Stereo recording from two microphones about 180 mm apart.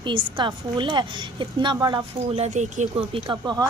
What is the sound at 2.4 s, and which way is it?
Speech, 40° right (ahead or behind).